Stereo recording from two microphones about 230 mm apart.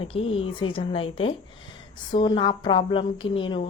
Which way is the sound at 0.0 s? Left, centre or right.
Left.